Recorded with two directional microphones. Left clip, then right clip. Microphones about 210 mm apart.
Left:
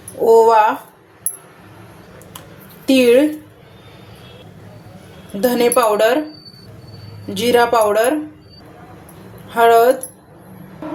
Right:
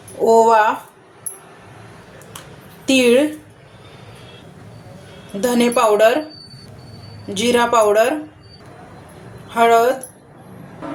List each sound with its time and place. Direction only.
0.3 s a woman's voice: 5° left (ahead or behind)
2.8 s a woman's voice: 5° left (ahead or behind)
5.4 s speech: 10° left (ahead or behind)
7.3 s speech: 5° left (ahead or behind)
9.5 s speech: 10° left (ahead or behind)